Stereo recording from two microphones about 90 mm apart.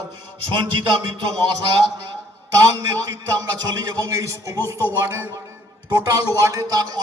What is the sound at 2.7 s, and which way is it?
A man's voice, 40° right (ahead or behind).